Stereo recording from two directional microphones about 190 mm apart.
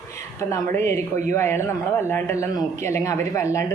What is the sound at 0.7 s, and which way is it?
A man's voice, 15° left (ahead or behind).